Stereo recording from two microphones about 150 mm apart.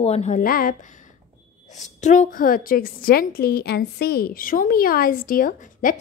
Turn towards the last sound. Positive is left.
turn(degrees=65)  # may be behind; listen again after turning